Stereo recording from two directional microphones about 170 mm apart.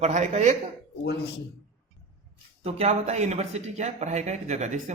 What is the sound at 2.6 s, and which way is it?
Speech, 40° right (ahead or behind).